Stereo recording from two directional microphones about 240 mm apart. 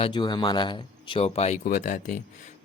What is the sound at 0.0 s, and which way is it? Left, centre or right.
Speech, centre.